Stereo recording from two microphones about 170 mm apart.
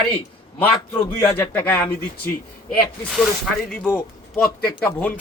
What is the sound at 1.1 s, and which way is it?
Speech, 10° left (ahead or behind).